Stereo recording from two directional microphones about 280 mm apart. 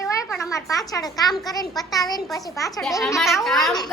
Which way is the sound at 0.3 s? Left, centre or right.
Centre.